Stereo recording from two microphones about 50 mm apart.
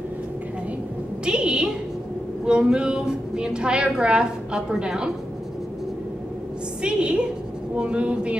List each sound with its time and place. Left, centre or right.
1.2 s a sound: centre
2.4 s a woman's voice: centre
6.8 s speech: centre